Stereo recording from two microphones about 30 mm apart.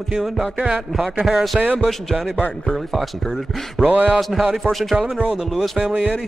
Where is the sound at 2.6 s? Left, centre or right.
Centre.